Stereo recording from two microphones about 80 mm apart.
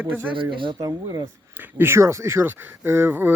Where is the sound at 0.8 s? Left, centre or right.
Right.